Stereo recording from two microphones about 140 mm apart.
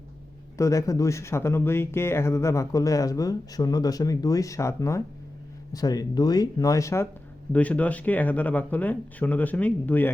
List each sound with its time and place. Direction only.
0.5 s speech: 25° left (ahead or behind)